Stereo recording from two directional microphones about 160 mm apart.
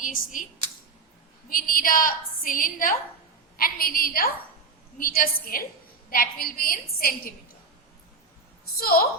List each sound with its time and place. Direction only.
0.0 s speech: 55° left (ahead or behind)
1.5 s a woman's voice: 60° left (ahead or behind)
8.8 s a woman's voice: 70° left (ahead or behind)